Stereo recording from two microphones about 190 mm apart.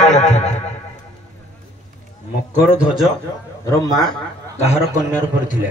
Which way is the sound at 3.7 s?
20° left (ahead or behind).